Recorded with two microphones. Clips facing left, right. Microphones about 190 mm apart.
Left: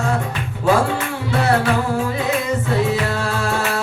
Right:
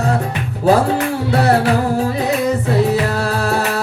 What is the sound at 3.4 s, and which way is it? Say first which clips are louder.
Music: right 3 dB; 40° right (ahead or behind).